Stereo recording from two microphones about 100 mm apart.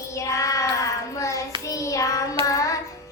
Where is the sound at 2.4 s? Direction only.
35° left (ahead or behind).